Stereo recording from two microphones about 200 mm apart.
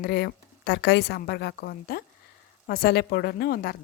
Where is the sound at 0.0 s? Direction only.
50° left (ahead or behind).